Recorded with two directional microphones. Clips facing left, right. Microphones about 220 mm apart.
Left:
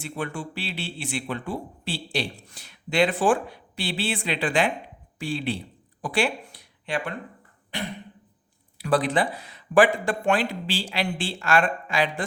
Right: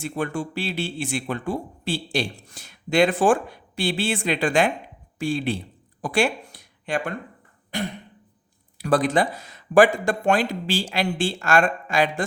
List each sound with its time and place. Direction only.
0.0 s a man's voice: 45° right (ahead or behind)